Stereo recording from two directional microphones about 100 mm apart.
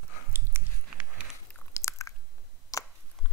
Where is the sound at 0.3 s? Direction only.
20° right (ahead or behind).